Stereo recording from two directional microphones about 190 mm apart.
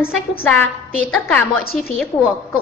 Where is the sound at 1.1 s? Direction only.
5° left (ahead or behind).